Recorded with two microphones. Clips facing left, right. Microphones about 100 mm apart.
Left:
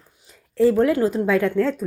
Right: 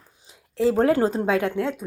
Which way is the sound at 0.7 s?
35° right (ahead or behind).